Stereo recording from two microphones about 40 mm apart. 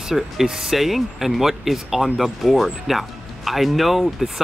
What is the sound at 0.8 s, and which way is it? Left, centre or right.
Speech, centre.